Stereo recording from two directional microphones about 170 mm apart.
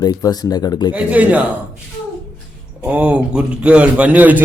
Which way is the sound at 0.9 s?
10° right (ahead or behind).